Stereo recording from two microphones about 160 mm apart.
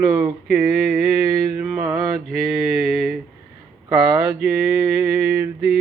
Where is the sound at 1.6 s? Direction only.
10° right (ahead or behind).